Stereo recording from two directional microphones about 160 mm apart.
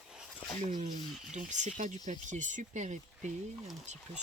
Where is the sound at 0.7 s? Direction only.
50° right (ahead or behind).